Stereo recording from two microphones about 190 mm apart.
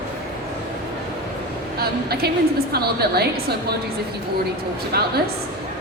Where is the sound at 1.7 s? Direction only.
55° right (ahead or behind).